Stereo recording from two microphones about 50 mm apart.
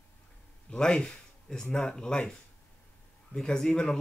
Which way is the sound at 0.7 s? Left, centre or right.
Centre.